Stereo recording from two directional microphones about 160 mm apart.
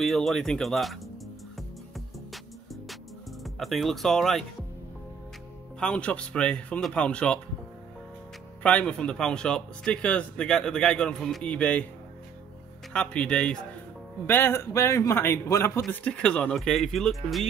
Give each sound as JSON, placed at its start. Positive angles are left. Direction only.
{"t": 0.0, "sound": "a man's voice", "side_deg": 0}
{"t": 2.0, "sound": "music", "side_deg": 0}
{"t": 3.4, "sound": "a man's voice", "side_deg": 0}
{"t": 5.8, "sound": "speech", "side_deg": 5}
{"t": 8.6, "sound": "a man's voice", "side_deg": 5}
{"t": 12.9, "sound": "speech", "side_deg": 5}
{"t": 15.9, "sound": "a man's voice", "side_deg": 5}